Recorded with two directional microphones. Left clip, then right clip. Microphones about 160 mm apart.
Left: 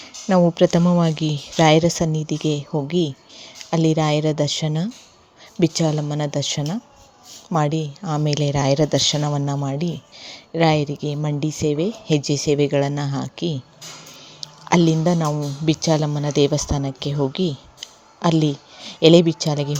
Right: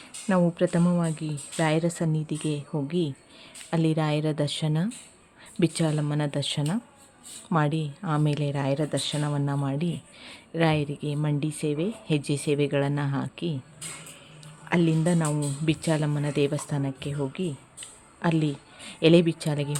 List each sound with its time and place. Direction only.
0.0 s a woman's voice: 25° left (ahead or behind)
14.7 s a woman's voice: 20° left (ahead or behind)
18.2 s speech: 20° left (ahead or behind)